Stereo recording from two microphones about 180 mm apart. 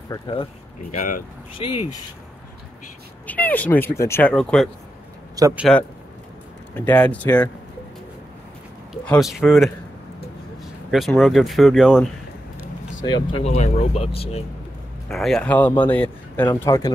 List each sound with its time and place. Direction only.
0.1 s speech: 25° left (ahead or behind)
0.9 s speech: 45° left (ahead or behind)
1.6 s speech: 30° left (ahead or behind)
3.3 s speech: 10° left (ahead or behind)
5.3 s speech: 20° right (ahead or behind)
6.7 s speech: 10° left (ahead or behind)
8.9 s speech: centre (ahead or behind)
13.0 s speech: 25° left (ahead or behind)
13.5 s speech: 40° left (ahead or behind)
15.0 s speech: centre (ahead or behind)